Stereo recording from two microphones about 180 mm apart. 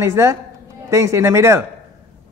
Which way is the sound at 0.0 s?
15° right (ahead or behind).